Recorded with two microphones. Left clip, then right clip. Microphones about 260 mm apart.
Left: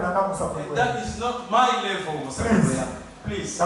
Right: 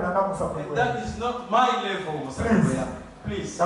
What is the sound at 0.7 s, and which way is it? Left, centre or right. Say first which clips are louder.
Speech: left 1 dB; centre.